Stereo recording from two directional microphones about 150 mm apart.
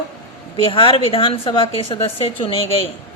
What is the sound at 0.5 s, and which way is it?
A woman's voice, 35° left (ahead or behind).